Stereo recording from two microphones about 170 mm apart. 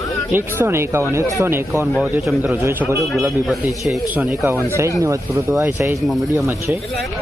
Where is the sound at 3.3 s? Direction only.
Centre (ahead or behind); by 6.6 s 15° right (ahead or behind).